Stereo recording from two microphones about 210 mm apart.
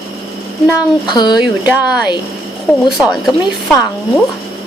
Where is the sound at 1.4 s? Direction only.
5° right (ahead or behind).